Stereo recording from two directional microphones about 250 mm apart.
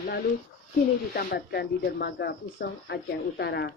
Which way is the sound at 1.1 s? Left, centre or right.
Left.